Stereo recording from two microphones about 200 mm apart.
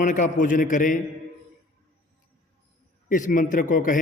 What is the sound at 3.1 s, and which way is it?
Speech, 40° left (ahead or behind).